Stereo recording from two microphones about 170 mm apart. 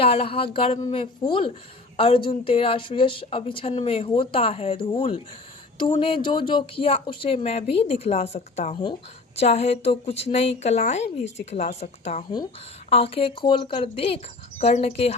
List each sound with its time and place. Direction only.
0.0 s speech: 35° left (ahead or behind)